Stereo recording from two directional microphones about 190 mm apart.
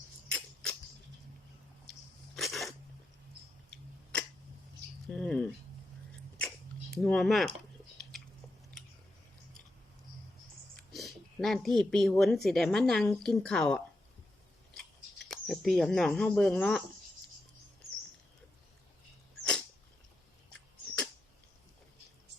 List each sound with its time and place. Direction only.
0.3 s a sound: 5° left (ahead or behind)
1.9 s a sound: centre (ahead or behind)
3.7 s tick-tock: 5° left (ahead or behind)
5.0 s rodents: 5° left (ahead or behind)
6.9 s speech: 5° left (ahead or behind)
10.8 s speech: centre (ahead or behind)
15.3 s speech: centre (ahead or behind)
20.5 s dog: 5° left (ahead or behind)